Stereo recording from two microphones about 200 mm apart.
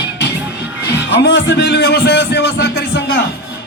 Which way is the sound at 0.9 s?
60° left (ahead or behind).